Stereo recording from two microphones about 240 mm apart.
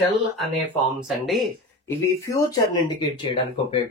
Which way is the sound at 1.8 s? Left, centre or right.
Centre.